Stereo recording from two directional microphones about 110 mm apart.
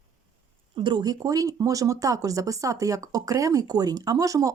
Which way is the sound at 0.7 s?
45° right (ahead or behind).